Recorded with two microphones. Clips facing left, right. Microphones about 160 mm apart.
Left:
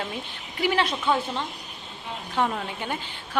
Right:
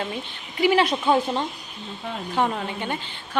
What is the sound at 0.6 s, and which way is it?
Speech, 10° right (ahead or behind).